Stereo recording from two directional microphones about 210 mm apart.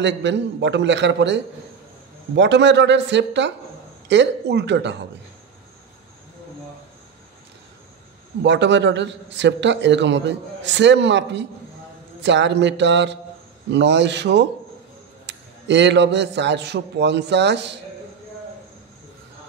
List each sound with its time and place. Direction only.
0.0 s a man's voice: 55° right (ahead or behind)
8.4 s a man's voice: 55° right (ahead or behind)